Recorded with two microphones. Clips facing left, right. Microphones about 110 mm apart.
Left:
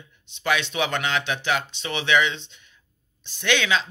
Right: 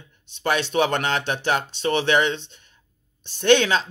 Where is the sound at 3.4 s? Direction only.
45° right (ahead or behind).